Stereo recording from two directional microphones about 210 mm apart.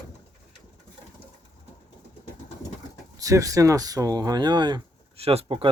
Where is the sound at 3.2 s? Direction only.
15° right (ahead or behind).